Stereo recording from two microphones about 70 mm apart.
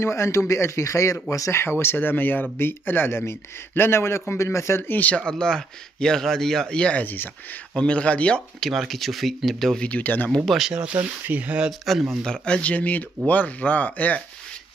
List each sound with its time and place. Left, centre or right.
0.0 s a man's voice: left
1.6 s speech: left
5.1 s speech: centre
8.5 s speech: centre
9.8 s speech: left
10.4 s speech: centre
10.7 s speech: centre
11.8 s speech: centre
12.2 s speech: centre